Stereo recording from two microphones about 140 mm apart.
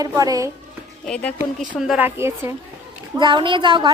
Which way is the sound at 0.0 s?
25° right (ahead or behind).